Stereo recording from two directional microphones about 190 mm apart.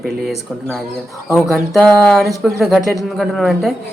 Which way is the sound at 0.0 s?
Centre (ahead or behind).